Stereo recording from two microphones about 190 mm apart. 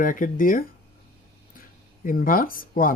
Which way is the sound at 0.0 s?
45° left (ahead or behind).